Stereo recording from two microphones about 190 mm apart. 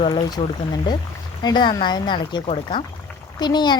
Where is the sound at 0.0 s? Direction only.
25° left (ahead or behind).